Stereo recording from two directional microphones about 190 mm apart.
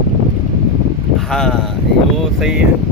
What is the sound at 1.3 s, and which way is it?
Speech, 5° left (ahead or behind).